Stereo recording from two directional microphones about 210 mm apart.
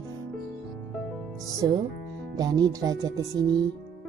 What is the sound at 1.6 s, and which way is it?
Speech, 15° right (ahead or behind).